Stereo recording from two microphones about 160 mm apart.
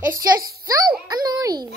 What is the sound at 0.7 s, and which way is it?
A child's voice, 25° right (ahead or behind).